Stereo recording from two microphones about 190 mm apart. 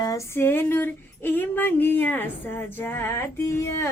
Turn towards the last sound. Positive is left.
turn(degrees=15)  # may be behind; listen again after turning